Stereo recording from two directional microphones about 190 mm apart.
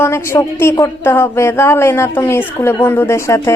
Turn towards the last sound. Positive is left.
turn(degrees=15)  # may be behind; listen again after turning